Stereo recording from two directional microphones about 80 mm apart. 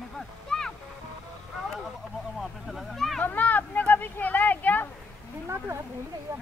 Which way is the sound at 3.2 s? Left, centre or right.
Left.